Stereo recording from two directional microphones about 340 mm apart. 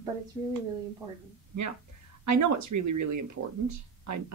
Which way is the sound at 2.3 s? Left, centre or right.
Right.